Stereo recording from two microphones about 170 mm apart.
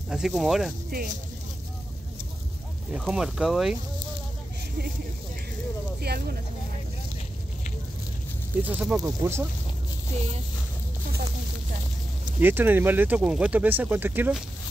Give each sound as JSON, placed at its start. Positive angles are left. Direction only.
{"t": 0.1, "sound": "speech", "side_deg": 0}
{"t": 0.8, "sound": "speech", "side_deg": -60}
{"t": 2.9, "sound": "speech", "side_deg": -5}
{"t": 5.9, "sound": "speech", "side_deg": -65}
{"t": 8.6, "sound": "speech", "side_deg": -5}
{"t": 12.4, "sound": "speech", "side_deg": -10}